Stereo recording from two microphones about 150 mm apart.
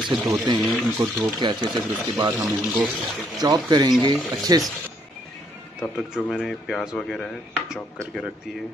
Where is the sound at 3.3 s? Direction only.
25° right (ahead or behind).